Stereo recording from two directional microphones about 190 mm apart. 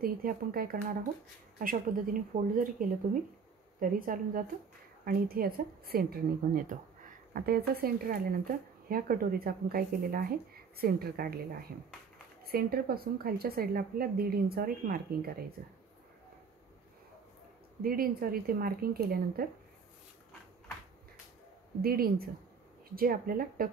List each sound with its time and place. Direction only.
0.0 s speech: 50° right (ahead or behind)
12.4 s speech: 50° right (ahead or behind)
17.8 s speech: 50° right (ahead or behind)
21.8 s speech: 50° right (ahead or behind)